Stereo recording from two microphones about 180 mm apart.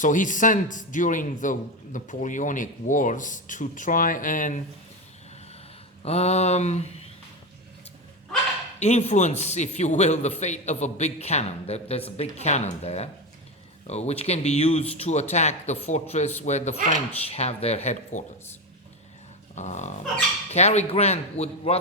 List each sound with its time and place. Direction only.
0.0 s a man's voice: 45° left (ahead or behind)
6.1 s a man's voice: 35° left (ahead or behind)
8.8 s a man's voice: 35° left (ahead or behind)
19.5 s a man's voice: 40° left (ahead or behind)